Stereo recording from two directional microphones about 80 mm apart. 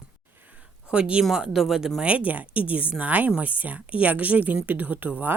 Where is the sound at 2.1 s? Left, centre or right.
Centre.